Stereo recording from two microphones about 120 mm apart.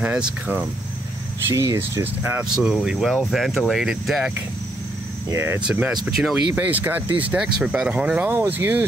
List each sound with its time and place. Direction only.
0.0 s speech: 10° right (ahead or behind)
1.5 s speech: 25° right (ahead or behind)
2.5 s speech: 5° right (ahead or behind)
5.3 s speech: 20° right (ahead or behind)
5.7 s speech: 5° right (ahead or behind)